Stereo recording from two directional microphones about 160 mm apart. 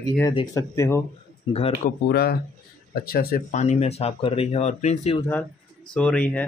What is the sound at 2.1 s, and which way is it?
Speech, 80° left.